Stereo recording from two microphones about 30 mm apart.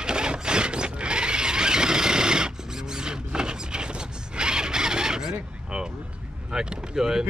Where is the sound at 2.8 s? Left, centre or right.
Right.